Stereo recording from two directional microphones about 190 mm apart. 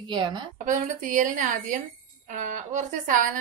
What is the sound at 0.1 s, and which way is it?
Speech, 25° right (ahead or behind).